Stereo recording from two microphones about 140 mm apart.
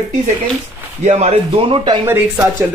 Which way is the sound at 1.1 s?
50° right (ahead or behind).